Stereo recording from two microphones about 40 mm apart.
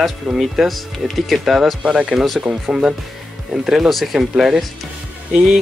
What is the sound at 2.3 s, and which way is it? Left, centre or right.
Speech, centre.